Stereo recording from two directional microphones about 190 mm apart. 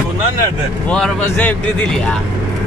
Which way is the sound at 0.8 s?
5° left (ahead or behind).